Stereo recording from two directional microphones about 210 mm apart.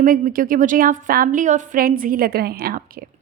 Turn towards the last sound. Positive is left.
turn(degrees=-45)  # may be behind; listen again after turning